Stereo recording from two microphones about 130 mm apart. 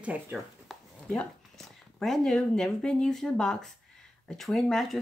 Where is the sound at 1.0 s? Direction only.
10° left (ahead or behind).